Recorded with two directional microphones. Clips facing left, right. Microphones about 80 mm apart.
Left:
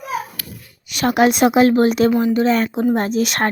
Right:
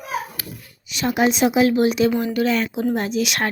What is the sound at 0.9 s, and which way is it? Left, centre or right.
Speech, left.